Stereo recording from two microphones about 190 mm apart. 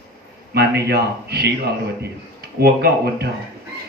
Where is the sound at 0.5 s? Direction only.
60° right (ahead or behind).